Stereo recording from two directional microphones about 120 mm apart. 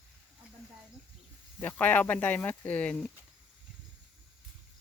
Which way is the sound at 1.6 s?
15° left (ahead or behind).